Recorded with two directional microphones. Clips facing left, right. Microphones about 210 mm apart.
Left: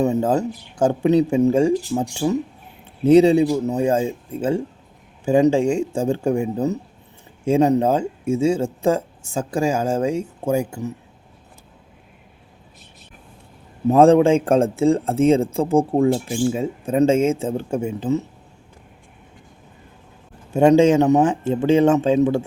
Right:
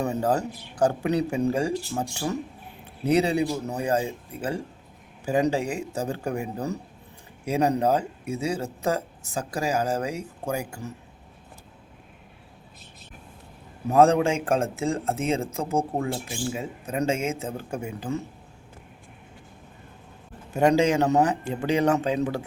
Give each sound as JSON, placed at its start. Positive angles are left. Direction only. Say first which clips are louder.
{"t": 0.0, "sound": "speech", "louder": "left 6 dB", "side_deg": 20}
{"t": 13.8, "sound": "speech", "louder": "left 6 dB", "side_deg": 30}
{"t": 20.5, "sound": "speech", "louder": "left 7 dB", "side_deg": 25}